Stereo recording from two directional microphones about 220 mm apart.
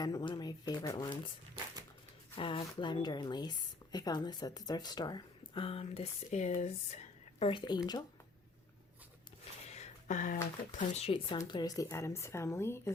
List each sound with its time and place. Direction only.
0.0 s a woman's voice: 15° left (ahead or behind)
2.3 s a woman's voice: 25° left (ahead or behind)
9.6 s speech: 30° left (ahead or behind); by 12.9 s 10° left (ahead or behind)